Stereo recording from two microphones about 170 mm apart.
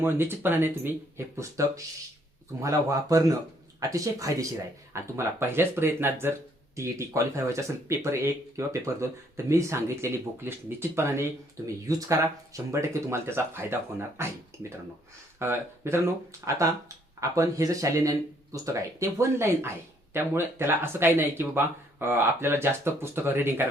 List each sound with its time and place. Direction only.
0.0 s speech: 10° right (ahead or behind)
15.4 s speech: 15° right (ahead or behind)
17.2 s speech: 20° right (ahead or behind)